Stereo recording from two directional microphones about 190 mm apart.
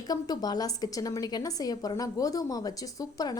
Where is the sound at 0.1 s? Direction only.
20° left (ahead or behind).